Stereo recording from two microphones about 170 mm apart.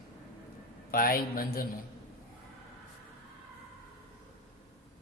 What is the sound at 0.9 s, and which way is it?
Speech, 60° left (ahead or behind).